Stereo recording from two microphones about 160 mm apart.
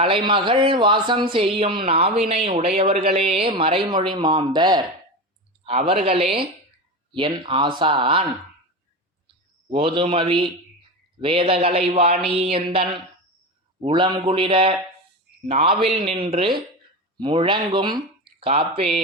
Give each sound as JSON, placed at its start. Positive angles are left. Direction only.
{"t": 0.0, "sound": "speech", "side_deg": -35}
{"t": 5.6, "sound": "speech", "side_deg": -40}
{"t": 9.6, "sound": "speech", "side_deg": -35}